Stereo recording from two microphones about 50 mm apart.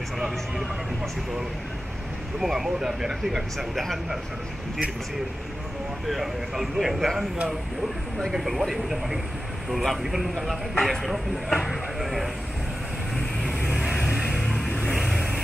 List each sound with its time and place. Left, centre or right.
2.4 s speech: centre
3.5 s speech: centre
6.0 s speech: centre
8.3 s speech: centre
13.1 s vehicle: centre
13.7 s vehicle: centre
14.4 s a sound: centre
15.0 s vehicle: centre